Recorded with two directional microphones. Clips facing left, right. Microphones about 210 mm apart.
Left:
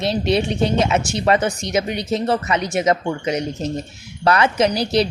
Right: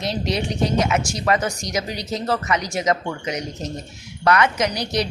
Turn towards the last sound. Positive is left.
turn(degrees=30)  # may be behind; listen again after turning